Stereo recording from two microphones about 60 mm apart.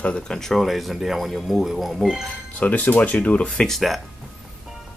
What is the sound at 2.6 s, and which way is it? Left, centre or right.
Speech, left.